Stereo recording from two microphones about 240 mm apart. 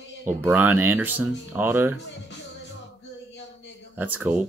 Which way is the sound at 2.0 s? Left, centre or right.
Left.